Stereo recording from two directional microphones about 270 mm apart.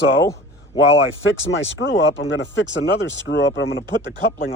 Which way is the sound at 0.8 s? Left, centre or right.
Left.